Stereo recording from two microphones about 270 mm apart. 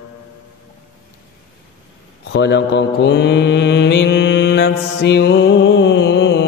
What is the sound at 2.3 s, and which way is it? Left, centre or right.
Mantra, left.